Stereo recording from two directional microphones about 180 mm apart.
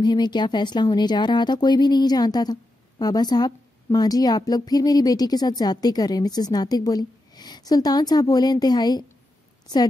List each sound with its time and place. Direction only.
0.0 s speech: 25° left (ahead or behind)